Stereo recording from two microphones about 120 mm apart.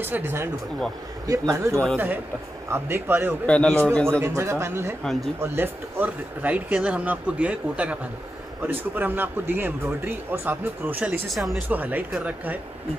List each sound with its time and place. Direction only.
0.0 s a man's voice: 15° right (ahead or behind)
3.4 s a man's voice: 10° left (ahead or behind)
4.1 s a man's voice: 20° right (ahead or behind)
11.2 s speech: centre (ahead or behind)
11.7 s speech: 15° right (ahead or behind)